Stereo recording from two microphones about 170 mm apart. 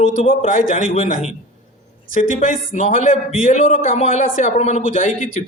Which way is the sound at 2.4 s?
45° left (ahead or behind).